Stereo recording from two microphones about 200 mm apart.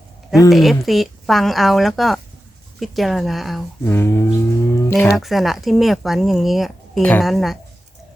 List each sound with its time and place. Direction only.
0.5 s speech: centre (ahead or behind)
3.8 s a sound: 10° left (ahead or behind)
5.1 s speech: centre (ahead or behind)